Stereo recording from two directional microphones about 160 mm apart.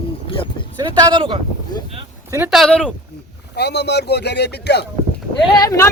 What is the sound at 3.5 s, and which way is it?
Speech, 90° left.